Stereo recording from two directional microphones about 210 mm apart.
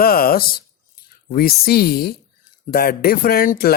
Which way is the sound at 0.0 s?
45° left (ahead or behind).